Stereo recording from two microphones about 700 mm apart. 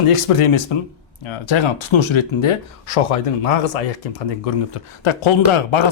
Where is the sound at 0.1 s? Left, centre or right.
Left.